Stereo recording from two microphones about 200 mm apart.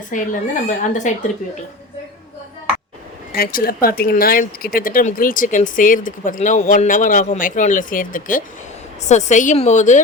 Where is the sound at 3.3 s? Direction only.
50° left (ahead or behind).